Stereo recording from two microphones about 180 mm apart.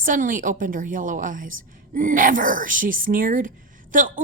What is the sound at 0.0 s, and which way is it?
A woman's voice, 50° right (ahead or behind).